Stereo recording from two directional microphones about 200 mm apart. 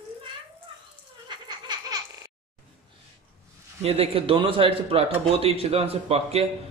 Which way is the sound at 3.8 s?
30° right (ahead or behind).